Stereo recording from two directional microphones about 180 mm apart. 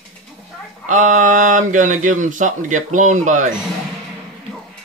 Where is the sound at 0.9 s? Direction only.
45° right (ahead or behind).